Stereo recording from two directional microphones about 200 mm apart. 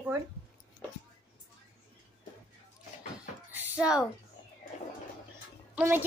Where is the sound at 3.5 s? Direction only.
10° right (ahead or behind).